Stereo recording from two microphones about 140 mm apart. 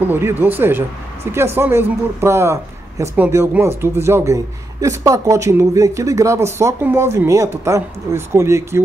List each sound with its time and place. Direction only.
0.0 s speech: 15° right (ahead or behind)